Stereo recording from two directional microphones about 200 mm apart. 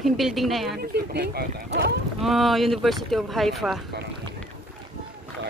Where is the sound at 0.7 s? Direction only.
50° right (ahead or behind).